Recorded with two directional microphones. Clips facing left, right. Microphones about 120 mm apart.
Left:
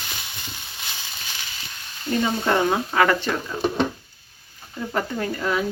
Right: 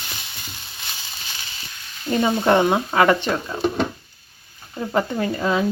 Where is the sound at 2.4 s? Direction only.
25° right (ahead or behind).